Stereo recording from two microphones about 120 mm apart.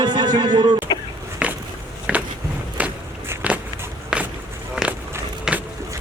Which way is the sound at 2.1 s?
10° right (ahead or behind).